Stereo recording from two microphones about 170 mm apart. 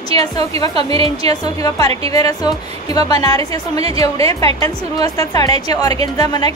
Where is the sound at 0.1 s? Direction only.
35° right (ahead or behind).